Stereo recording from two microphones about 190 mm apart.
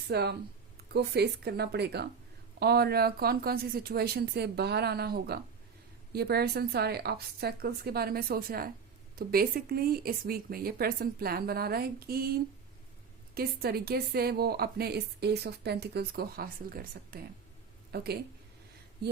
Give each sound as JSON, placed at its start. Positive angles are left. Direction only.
{"t": 0.1, "sound": "a woman's voice", "side_deg": -60}